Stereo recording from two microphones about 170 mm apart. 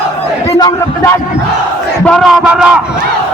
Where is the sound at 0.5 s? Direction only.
20° left (ahead or behind).